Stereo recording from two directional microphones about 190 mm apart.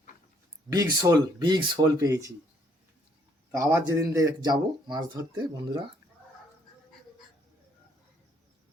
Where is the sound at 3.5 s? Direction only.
15° right (ahead or behind).